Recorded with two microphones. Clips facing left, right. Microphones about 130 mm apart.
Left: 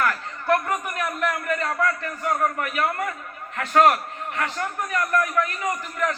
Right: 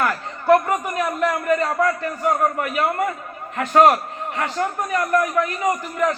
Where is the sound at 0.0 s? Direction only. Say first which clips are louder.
Right 3 dB; 25° right (ahead or behind).